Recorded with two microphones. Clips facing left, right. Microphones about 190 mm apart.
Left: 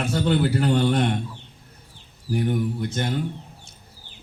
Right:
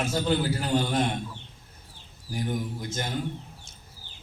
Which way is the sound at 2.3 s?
60° left (ahead or behind).